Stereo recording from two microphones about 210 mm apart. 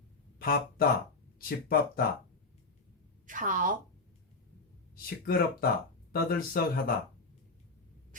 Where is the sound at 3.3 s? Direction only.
40° right (ahead or behind).